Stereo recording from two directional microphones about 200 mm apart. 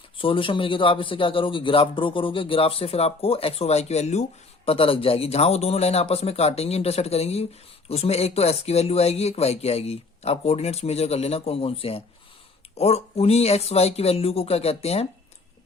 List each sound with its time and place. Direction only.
0.2 s a man's voice: 25° left (ahead or behind)